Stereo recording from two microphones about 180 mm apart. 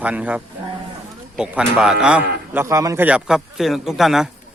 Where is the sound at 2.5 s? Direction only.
15° right (ahead or behind).